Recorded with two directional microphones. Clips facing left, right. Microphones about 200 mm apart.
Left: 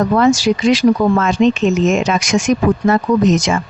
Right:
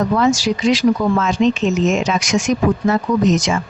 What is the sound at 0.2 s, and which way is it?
Speech, 60° left (ahead or behind).